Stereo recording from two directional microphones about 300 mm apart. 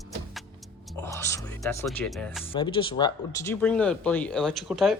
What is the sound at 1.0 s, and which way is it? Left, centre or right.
Speech, centre.